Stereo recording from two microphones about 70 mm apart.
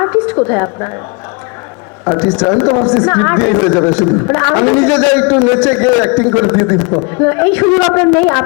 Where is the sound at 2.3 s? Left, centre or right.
Centre.